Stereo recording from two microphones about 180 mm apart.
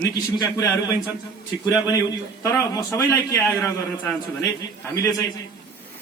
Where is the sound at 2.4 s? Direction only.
15° left (ahead or behind).